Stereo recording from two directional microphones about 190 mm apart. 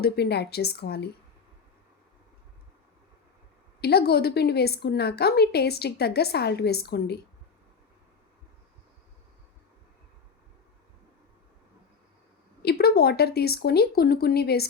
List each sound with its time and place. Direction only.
0.0 s a woman's voice: 60° left (ahead or behind)
3.8 s a woman's voice: 55° left (ahead or behind)
12.6 s a woman's voice: 55° left (ahead or behind)